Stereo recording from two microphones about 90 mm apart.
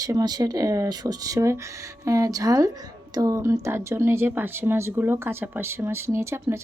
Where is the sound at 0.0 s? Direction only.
45° right (ahead or behind).